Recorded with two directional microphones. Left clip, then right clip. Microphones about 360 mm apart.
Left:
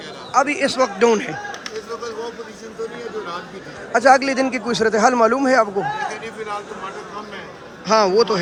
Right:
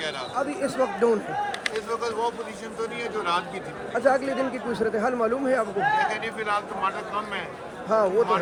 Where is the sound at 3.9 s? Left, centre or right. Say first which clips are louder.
Left 9 dB; centre.